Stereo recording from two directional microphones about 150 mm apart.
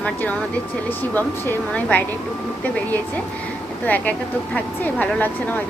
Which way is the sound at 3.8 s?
10° left (ahead or behind).